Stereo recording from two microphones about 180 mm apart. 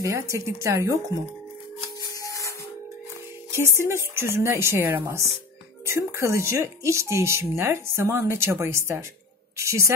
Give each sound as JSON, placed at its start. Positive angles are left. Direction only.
{"t": 0.0, "sound": "speech", "side_deg": -15}
{"t": 2.0, "sound": "rub", "side_deg": 15}
{"t": 3.5, "sound": "speech", "side_deg": -15}